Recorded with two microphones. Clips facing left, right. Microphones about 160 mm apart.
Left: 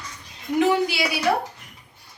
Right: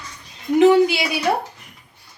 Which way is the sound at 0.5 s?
25° right (ahead or behind).